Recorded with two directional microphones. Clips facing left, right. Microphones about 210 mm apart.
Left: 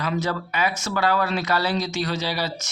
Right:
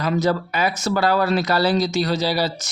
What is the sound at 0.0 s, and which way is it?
Speech, 40° right (ahead or behind).